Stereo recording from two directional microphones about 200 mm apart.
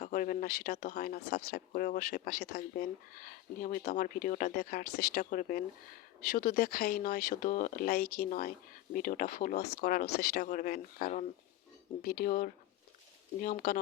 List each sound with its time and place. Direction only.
0.0 s speech: 40° left (ahead or behind)